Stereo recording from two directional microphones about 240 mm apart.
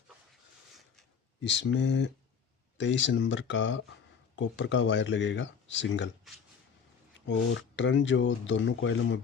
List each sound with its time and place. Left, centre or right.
1.5 s speech: left
6.3 s speech: centre
7.3 s speech: left